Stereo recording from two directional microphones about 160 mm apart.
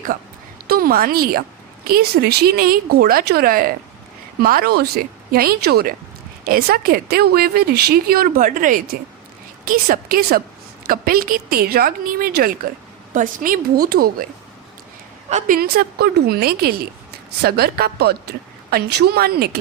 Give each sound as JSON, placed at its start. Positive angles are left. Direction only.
{"t": 0.7, "sound": "a woman's voice", "side_deg": -70}
{"t": 15.3, "sound": "a woman's voice", "side_deg": -45}
{"t": 15.5, "sound": "speech", "side_deg": -75}